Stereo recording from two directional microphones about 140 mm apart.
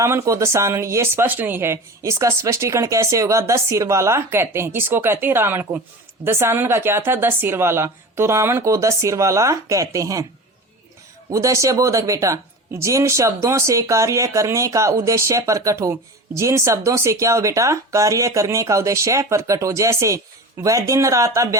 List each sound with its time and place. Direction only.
0.0 s speech: 20° right (ahead or behind)
11.3 s speech: 25° right (ahead or behind)